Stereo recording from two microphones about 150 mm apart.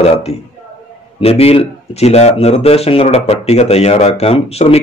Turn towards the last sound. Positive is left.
turn(degrees=45)  # may be behind; listen again after turning